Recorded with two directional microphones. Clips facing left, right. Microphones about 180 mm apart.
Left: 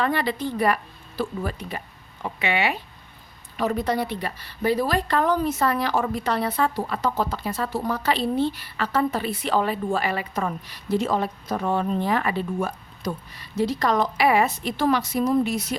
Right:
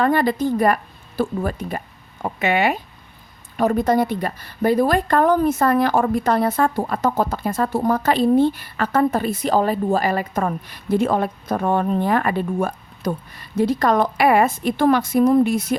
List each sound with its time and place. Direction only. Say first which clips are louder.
0.0 s a woman's voice: right 6 dB; 45° right (ahead or behind)